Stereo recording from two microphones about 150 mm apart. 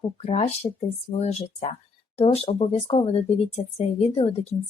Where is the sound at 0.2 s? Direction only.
45° left (ahead or behind).